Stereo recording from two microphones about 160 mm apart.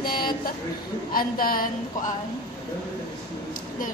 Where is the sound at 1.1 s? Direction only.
65° left (ahead or behind).